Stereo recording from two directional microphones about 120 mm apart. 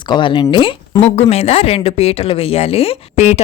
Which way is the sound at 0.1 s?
45° left (ahead or behind).